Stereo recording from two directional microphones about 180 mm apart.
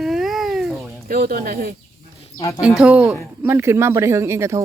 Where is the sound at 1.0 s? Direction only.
55° right (ahead or behind).